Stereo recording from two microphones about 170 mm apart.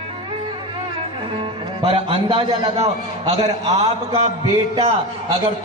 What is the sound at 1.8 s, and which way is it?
A man's voice, 35° right (ahead or behind).